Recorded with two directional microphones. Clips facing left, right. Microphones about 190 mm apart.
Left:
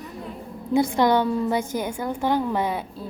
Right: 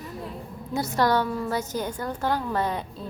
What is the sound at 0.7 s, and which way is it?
A woman's voice, 15° left (ahead or behind).